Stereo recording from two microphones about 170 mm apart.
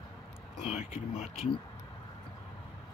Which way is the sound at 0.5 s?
35° left (ahead or behind).